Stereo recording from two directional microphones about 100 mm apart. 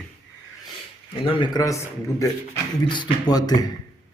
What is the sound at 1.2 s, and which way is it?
Speech, 50° left (ahead or behind).